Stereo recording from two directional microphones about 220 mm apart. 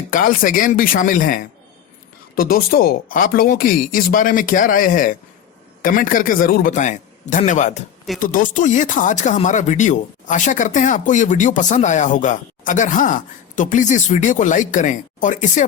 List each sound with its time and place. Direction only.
0.1 s speech: 40° left (ahead or behind)